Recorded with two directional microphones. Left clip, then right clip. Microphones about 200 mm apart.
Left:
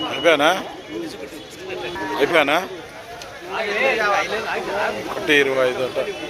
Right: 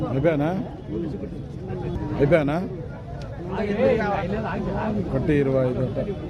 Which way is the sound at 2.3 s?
10° left (ahead or behind).